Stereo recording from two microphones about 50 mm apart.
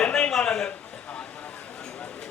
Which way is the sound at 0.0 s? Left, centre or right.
Centre.